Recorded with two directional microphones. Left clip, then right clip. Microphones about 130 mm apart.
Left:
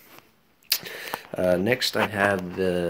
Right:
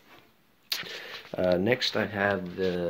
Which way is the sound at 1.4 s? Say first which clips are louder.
Left 3 dB; centre (ahead or behind).